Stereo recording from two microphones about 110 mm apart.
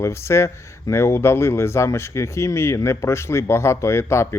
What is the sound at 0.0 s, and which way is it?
Speech, 25° left (ahead or behind).